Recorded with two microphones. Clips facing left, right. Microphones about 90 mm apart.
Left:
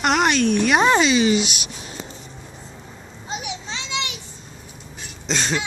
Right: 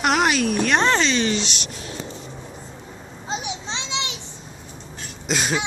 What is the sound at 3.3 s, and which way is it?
Children playing, 25° right (ahead or behind).